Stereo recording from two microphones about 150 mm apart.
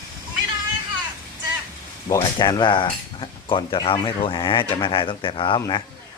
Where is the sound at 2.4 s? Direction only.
30° left (ahead or behind).